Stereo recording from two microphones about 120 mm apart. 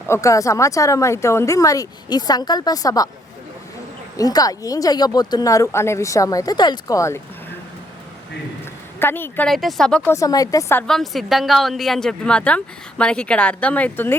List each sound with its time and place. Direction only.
0.1 s speech: 25° left (ahead or behind)
4.2 s speech: 30° left (ahead or behind)
9.0 s a woman's voice: 20° left (ahead or behind)
9.5 s speech: centre (ahead or behind)
10.1 s speech: 30° left (ahead or behind)
10.8 s speech: centre (ahead or behind)